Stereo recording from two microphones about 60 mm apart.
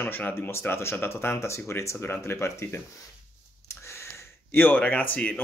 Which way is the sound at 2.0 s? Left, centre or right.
Left.